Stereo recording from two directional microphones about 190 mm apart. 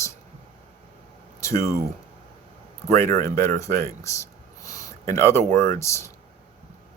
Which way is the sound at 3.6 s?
15° left (ahead or behind).